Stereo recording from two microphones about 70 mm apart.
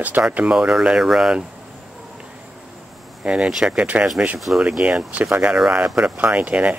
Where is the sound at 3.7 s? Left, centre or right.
Right.